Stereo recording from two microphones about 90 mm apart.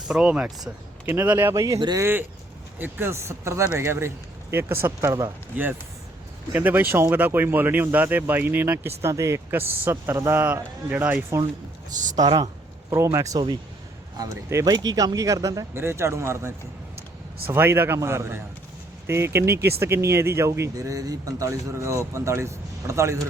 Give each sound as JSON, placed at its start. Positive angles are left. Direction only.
{"t": 0.1, "sound": "speech", "side_deg": -10}
{"t": 1.0, "sound": "speech", "side_deg": -25}
{"t": 6.5, "sound": "speech", "side_deg": -20}
{"t": 10.4, "sound": "speech", "side_deg": -15}
{"t": 12.1, "sound": "speech", "side_deg": -45}
{"t": 12.9, "sound": "speech", "side_deg": -30}
{"t": 14.7, "sound": "speech", "side_deg": -50}
{"t": 15.7, "sound": "speech", "side_deg": -30}
{"t": 17.5, "sound": "speech", "side_deg": -25}